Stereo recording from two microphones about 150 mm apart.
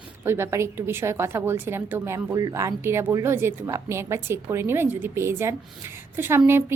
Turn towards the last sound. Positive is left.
turn(degrees=-15)  # may be behind; listen again after turning